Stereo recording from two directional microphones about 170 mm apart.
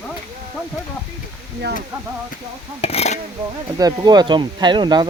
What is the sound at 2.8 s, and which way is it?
Speech, 40° left (ahead or behind).